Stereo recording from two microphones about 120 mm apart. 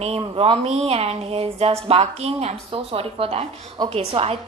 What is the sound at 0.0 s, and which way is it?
A woman's voice, 55° right (ahead or behind).